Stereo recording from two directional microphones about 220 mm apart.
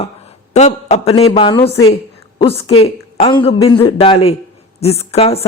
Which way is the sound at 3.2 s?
25° left (ahead or behind).